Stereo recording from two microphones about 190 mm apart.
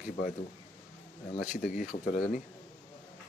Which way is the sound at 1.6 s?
45° left (ahead or behind).